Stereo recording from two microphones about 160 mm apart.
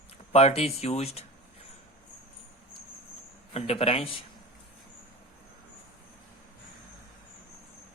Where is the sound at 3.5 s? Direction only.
40° left (ahead or behind).